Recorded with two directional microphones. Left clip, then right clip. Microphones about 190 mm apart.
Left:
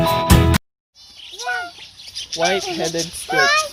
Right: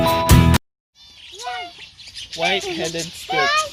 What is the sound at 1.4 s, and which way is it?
Bird, 40° left (ahead or behind).